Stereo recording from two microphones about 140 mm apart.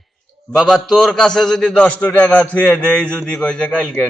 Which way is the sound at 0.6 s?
Centre (ahead or behind).